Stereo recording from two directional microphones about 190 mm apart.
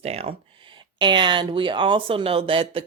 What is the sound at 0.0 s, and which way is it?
Speech, 30° right (ahead or behind).